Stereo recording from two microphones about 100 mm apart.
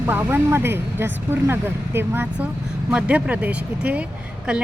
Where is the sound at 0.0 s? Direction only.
20° right (ahead or behind).